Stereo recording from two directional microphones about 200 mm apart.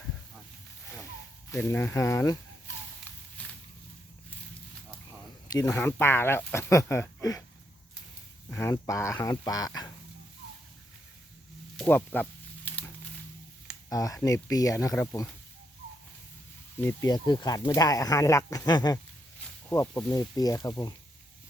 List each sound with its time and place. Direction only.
1.5 s speech: 10° left (ahead or behind)
3.4 s a sound: 5° left (ahead or behind)
5.6 s speech: 10° left (ahead or behind)
8.4 s speech: 10° left (ahead or behind)
11.8 s a sound: 10° left (ahead or behind)
13.9 s speech: 15° left (ahead or behind)
16.8 s speech: 20° left (ahead or behind)